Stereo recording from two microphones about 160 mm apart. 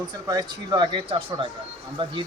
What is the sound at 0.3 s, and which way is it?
Speech, 25° right (ahead or behind).